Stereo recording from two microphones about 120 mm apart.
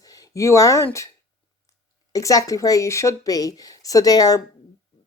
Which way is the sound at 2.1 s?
30° left (ahead or behind).